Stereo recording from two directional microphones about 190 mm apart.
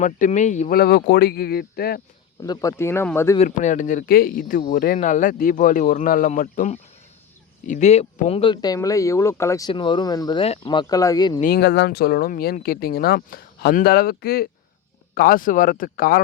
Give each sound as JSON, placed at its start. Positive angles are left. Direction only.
{"t": 0.0, "sound": "speech", "side_deg": 40}
{"t": 0.8, "sound": "speech", "side_deg": 55}
{"t": 2.4, "sound": "speech", "side_deg": 20}
{"t": 3.3, "sound": "speech", "side_deg": 40}
{"t": 11.3, "sound": "speech", "side_deg": 50}